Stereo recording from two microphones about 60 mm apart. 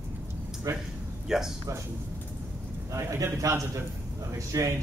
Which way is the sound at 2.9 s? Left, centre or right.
Right.